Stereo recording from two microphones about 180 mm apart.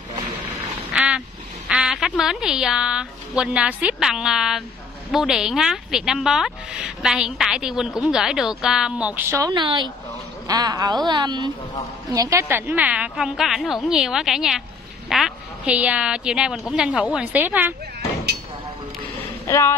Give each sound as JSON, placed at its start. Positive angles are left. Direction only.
{"t": 0.9, "sound": "duck", "side_deg": -5}
{"t": 1.7, "sound": "a woman's voice", "side_deg": -5}
{"t": 19.4, "sound": "speech", "side_deg": 15}